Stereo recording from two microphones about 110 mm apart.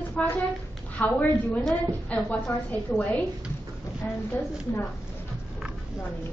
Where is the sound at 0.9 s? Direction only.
15° left (ahead or behind).